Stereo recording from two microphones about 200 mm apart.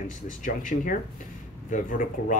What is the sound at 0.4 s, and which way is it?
A man's voice, 40° left (ahead or behind).